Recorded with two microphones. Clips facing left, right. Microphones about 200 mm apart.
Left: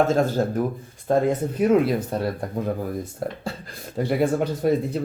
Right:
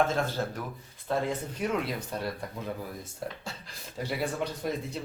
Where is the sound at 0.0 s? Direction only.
40° left (ahead or behind).